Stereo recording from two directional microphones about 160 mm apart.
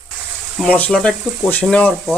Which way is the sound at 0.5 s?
5° left (ahead or behind).